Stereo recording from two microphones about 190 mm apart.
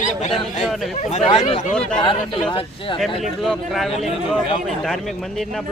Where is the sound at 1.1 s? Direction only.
35° left (ahead or behind).